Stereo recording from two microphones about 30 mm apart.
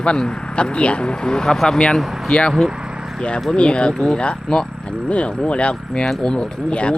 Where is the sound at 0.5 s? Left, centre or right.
Left.